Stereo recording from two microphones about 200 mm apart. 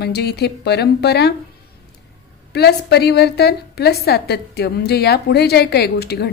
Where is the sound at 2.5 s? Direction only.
55° left (ahead or behind).